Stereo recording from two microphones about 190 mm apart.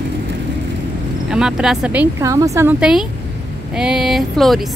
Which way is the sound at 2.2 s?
15° right (ahead or behind).